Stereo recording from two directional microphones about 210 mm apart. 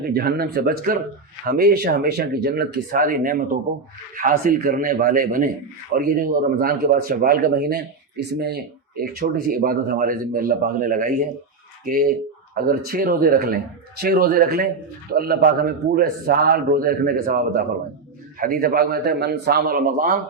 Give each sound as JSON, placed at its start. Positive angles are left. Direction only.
{"t": 0.1, "sound": "a man's voice", "side_deg": -45}
{"t": 9.6, "sound": "a man's voice", "side_deg": -40}
{"t": 12.5, "sound": "speech", "side_deg": -45}